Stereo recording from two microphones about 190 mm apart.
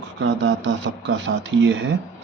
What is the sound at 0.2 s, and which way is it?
Speech, 80° right.